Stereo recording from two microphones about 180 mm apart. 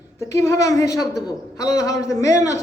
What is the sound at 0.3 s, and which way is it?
A man's voice, 15° left (ahead or behind).